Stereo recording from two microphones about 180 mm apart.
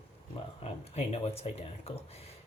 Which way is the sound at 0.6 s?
35° left (ahead or behind).